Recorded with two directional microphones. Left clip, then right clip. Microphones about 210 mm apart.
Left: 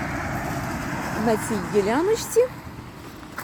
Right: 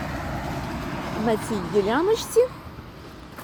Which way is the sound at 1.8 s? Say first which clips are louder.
Even; centre (ahead or behind).